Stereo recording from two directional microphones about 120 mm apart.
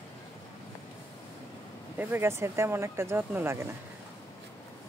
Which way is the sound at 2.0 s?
20° right (ahead or behind).